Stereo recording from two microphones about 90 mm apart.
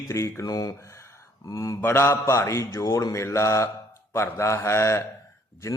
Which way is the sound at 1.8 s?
25° left (ahead or behind).